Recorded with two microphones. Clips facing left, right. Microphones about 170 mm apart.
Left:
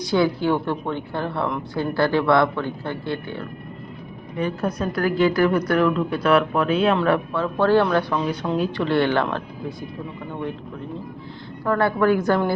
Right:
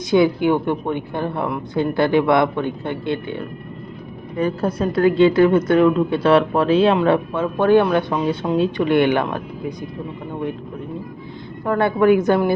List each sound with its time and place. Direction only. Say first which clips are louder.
0.1 s a woman's voice: right 4 dB; 20° right (ahead or behind)
4.6 s a woman's voice: right 7 dB; 25° right (ahead or behind)
6.9 s a woman's voice: right 3 dB; 20° right (ahead or behind)
11.6 s a woman's voice: right 3 dB; 20° right (ahead or behind)